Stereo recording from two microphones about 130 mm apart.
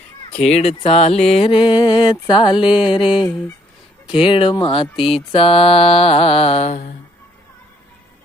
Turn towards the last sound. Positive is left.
turn(degrees=80)